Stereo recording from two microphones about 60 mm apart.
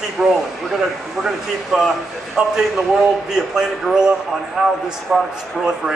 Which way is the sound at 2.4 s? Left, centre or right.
Centre.